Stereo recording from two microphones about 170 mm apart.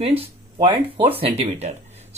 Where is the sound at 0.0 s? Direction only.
35° right (ahead or behind).